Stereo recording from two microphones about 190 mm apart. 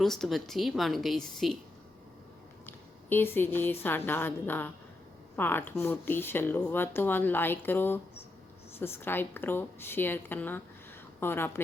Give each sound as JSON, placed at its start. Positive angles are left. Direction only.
{"t": 0.0, "sound": "a woman's voice", "side_deg": 0}
{"t": 2.6, "sound": "a woman's voice", "side_deg": 10}